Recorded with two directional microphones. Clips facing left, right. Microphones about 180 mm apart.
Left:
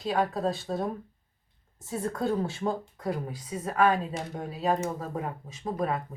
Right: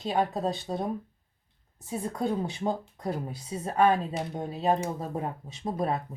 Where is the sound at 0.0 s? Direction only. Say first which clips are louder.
Even; 25° right (ahead or behind).